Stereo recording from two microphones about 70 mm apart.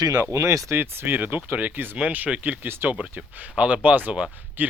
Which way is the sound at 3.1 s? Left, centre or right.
Centre.